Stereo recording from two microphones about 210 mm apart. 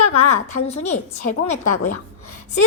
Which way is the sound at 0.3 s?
30° left (ahead or behind).